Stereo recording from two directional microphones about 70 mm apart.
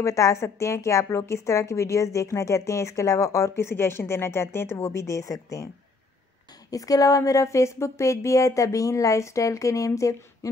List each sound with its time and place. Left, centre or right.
0.0 s a woman's voice: left
6.7 s a woman's voice: left